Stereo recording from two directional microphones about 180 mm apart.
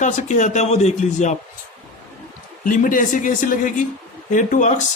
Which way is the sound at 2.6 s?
45° left (ahead or behind).